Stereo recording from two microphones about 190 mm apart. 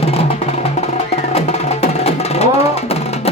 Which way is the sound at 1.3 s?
35° left (ahead or behind).